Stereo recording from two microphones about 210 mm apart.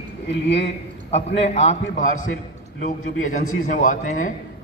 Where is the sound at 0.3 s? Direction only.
55° left (ahead or behind).